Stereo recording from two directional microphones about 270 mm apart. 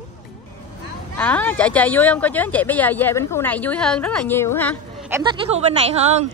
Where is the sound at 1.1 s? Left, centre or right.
Centre.